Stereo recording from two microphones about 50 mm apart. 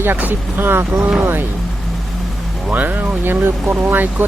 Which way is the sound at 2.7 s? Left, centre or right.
Right.